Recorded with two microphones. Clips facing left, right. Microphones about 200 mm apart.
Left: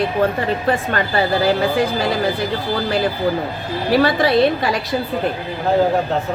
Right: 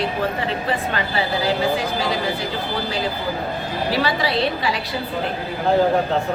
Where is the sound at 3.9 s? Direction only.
50° left (ahead or behind).